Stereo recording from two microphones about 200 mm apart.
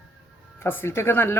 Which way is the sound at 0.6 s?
10° left (ahead or behind).